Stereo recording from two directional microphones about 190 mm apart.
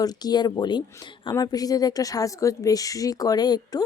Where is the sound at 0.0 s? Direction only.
20° left (ahead or behind).